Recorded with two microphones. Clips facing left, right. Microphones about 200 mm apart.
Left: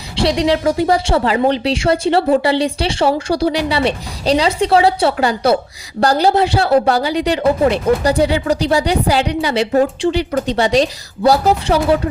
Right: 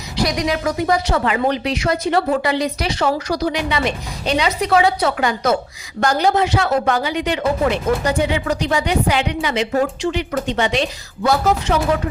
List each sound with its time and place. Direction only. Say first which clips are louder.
0.2 s speech: left 5 dB; 30° left (ahead or behind)